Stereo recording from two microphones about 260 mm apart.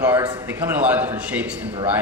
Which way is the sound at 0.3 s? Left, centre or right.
Centre.